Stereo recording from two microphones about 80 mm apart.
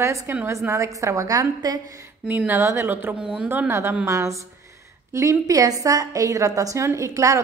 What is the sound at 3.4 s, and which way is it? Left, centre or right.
A woman's voice, right.